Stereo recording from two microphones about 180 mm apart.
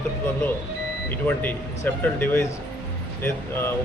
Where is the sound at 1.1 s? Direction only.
10° left (ahead or behind).